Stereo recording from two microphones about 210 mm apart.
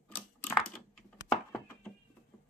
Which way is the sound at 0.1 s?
5° left (ahead or behind).